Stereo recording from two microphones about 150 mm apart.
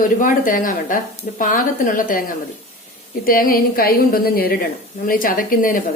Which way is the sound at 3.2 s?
75° left (ahead or behind).